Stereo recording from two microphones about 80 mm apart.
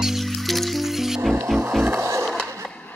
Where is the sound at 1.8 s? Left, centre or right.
Right.